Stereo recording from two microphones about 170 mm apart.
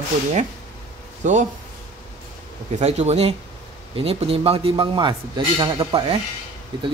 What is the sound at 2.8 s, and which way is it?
Speech, 40° right (ahead or behind).